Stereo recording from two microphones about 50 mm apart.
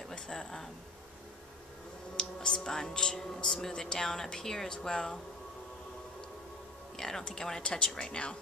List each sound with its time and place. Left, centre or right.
0.1 s speech: centre
2.1 s speech: centre
7.0 s speech: centre